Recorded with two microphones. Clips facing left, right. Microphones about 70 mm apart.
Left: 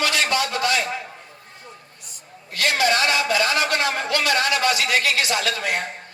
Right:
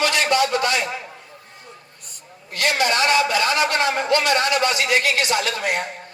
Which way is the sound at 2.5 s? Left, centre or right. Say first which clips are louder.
Even; right.